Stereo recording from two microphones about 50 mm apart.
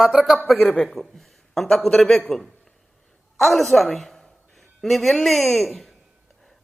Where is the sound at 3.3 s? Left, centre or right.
Centre.